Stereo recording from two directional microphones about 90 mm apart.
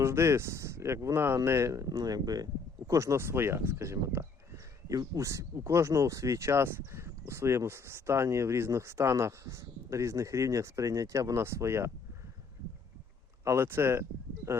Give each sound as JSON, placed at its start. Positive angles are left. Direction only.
{"t": 0.0, "sound": "speech", "side_deg": -30}
{"t": 1.9, "sound": "speech", "side_deg": -45}
{"t": 13.4, "sound": "speech", "side_deg": -30}